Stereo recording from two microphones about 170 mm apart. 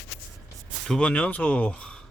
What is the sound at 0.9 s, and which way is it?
Speech, 5° left (ahead or behind).